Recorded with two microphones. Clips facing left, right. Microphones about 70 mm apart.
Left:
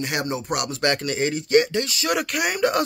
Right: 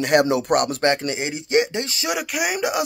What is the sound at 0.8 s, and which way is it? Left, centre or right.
Speech, right.